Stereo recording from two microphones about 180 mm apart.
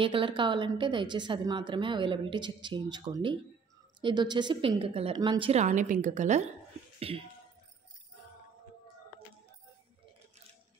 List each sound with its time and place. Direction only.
0.0 s a woman's voice: 30° right (ahead or behind)